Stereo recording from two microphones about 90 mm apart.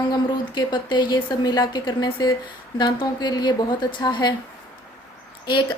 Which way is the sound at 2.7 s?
55° left (ahead or behind).